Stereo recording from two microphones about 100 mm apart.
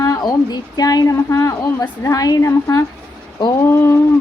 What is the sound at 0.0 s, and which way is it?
A woman's voice, 40° left (ahead or behind).